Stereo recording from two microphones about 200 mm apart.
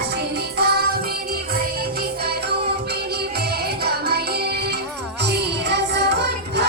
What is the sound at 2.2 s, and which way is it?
Music, 55° right (ahead or behind).